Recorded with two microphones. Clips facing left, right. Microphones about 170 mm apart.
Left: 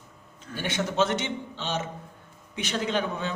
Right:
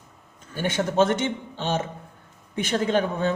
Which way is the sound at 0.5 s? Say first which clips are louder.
Right 5 dB; 45° right (ahead or behind).